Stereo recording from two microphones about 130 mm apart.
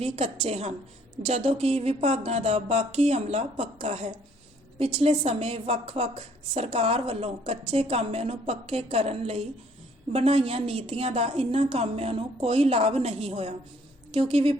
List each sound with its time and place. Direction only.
0.4 s a woman's voice: 55° right (ahead or behind)